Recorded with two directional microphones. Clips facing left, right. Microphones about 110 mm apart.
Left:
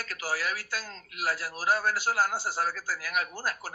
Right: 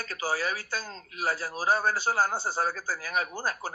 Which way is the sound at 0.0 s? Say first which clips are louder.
Right 2 dB; 25° right (ahead or behind).